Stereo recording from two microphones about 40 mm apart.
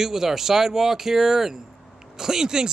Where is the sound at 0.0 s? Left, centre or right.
Centre.